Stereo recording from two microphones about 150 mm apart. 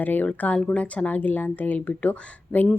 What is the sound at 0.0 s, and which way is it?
Speech, 10° left (ahead or behind).